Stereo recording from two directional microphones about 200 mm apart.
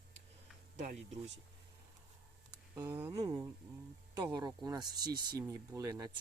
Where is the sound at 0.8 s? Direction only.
35° right (ahead or behind).